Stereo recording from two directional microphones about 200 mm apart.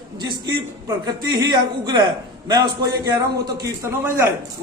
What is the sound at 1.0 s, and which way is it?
A man's voice, 20° right (ahead or behind).